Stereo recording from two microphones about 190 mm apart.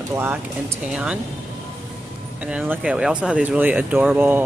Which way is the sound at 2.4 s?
5° right (ahead or behind).